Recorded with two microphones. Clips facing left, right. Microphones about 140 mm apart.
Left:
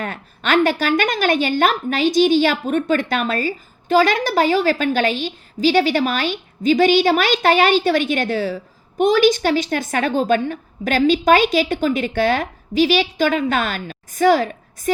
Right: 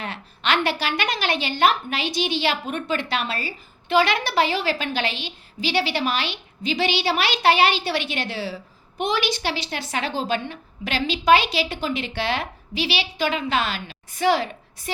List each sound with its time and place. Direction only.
0.0 s a woman's voice: 45° left (ahead or behind)